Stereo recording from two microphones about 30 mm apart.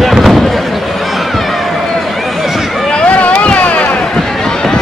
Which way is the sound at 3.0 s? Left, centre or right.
Left.